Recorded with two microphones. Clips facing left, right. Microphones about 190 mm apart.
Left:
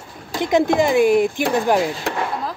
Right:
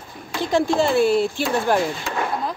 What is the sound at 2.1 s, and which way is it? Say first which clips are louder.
Speech: left 3 dB; 65° left (ahead or behind).